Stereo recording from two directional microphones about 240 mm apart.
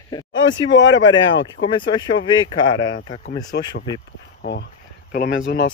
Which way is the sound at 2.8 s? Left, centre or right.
Left.